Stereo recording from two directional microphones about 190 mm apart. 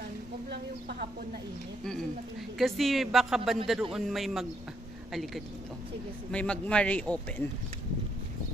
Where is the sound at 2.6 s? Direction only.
Centre (ahead or behind).